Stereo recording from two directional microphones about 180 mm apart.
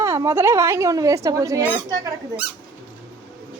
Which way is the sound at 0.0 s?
15° right (ahead or behind).